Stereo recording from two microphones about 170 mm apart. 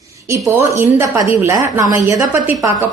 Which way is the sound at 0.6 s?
15° right (ahead or behind).